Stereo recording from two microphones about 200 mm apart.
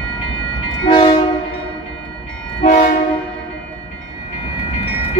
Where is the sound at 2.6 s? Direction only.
50° left (ahead or behind).